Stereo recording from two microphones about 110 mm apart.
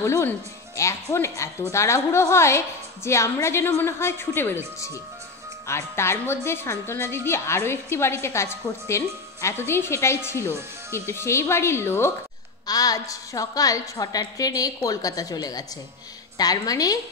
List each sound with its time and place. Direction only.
0.0 s a woman's voice: 25° left (ahead or behind)
5.7 s a woman's voice: 25° left (ahead or behind)
12.6 s a woman's voice: 35° left (ahead or behind)